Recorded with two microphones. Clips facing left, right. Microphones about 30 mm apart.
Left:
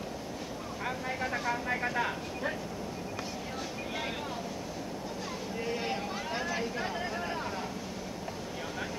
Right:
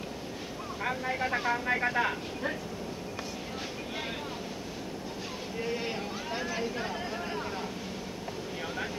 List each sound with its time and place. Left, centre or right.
0.8 s speech: centre
5.7 s speech: centre